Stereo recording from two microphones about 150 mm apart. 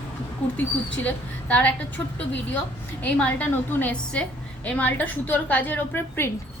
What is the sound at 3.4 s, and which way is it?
A woman's voice, 10° left (ahead or behind).